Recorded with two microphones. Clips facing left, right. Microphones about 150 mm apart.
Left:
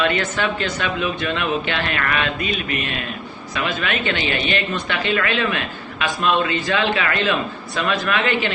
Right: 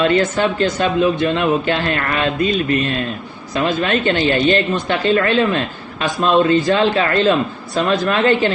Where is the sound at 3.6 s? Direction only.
35° right (ahead or behind).